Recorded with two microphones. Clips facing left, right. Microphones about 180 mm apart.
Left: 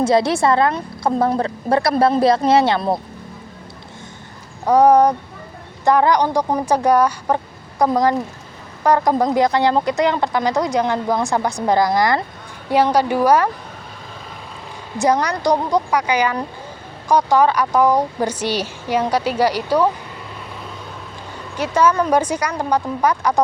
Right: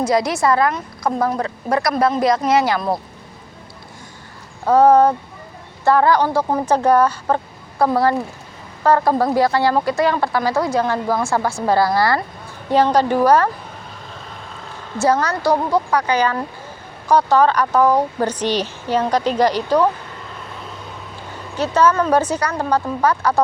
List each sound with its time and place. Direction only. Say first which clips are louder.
0.0 s speech: left 2 dB; 30° left (ahead or behind)
4.6 s speech: even; 15° left (ahead or behind)
14.9 s speech: even; 15° left (ahead or behind)
21.5 s speech: right 1 dB; 10° left (ahead or behind)